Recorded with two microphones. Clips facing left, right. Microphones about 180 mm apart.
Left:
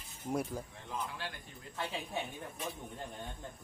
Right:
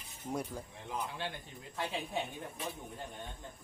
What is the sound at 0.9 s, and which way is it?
Speech, 25° right (ahead or behind).